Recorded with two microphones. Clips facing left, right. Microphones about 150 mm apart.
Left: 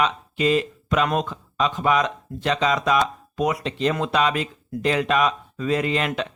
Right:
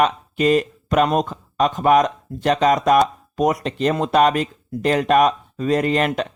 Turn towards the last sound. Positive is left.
turn(degrees=-45)  # may be behind; listen again after turning